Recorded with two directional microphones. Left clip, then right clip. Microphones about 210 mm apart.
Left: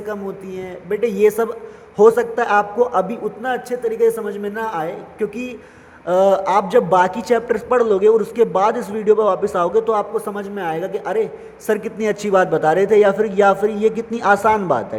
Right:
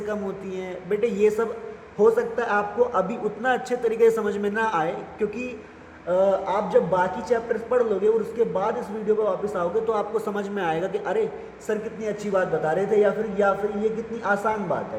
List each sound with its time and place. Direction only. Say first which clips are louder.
0.1 s a man's voice: left 6 dB; 20° left (ahead or behind)
6.1 s a man's voice: left 7 dB; 35° left (ahead or behind)
11.7 s a man's voice: left 8 dB; 40° left (ahead or behind)